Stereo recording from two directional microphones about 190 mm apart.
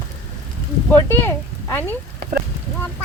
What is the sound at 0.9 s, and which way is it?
Speech, 10° left (ahead or behind).